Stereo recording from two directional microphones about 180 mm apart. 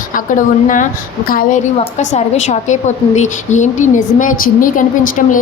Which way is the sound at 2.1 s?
40° left (ahead or behind).